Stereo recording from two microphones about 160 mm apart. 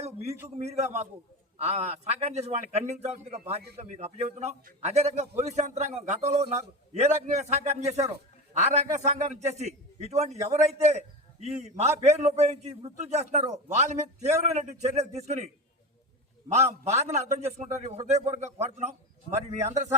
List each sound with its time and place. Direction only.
0.6 s a man's voice: 40° right (ahead or behind)
16.5 s a man's voice: 45° right (ahead or behind)